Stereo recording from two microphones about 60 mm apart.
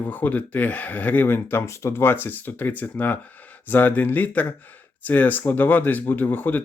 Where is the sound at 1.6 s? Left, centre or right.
Left.